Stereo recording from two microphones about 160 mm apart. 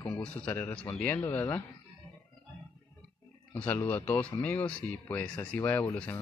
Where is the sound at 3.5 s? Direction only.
10° left (ahead or behind).